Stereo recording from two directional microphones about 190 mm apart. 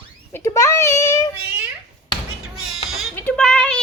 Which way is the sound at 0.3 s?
15° left (ahead or behind).